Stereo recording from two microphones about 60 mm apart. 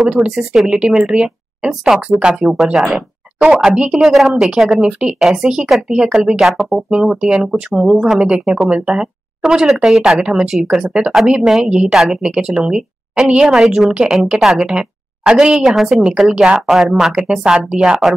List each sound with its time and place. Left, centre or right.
0.3 s speech: centre
0.7 s a woman's voice: centre
3.6 s speech: centre
4.0 s speech: centre
10.2 s speech: centre
10.5 s speech: centre